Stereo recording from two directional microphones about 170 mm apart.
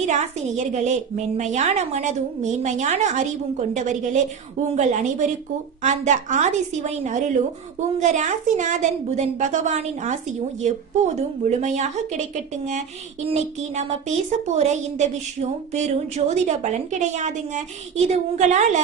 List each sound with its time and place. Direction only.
0.0 s speech: 45° right (ahead or behind)